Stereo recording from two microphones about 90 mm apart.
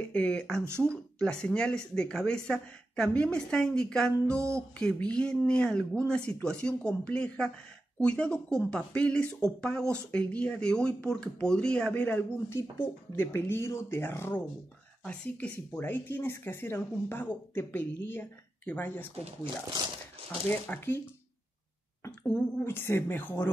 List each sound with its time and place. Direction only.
0.0 s speech: 15° left (ahead or behind)
11.9 s speech: 20° left (ahead or behind)
20.2 s speech: 20° left (ahead or behind)
22.6 s speech: 25° left (ahead or behind)